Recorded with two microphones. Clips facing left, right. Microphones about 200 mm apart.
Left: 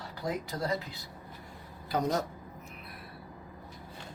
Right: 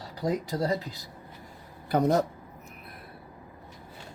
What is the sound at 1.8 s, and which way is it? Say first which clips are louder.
Speech: right 6 dB; 60° right (ahead or behind).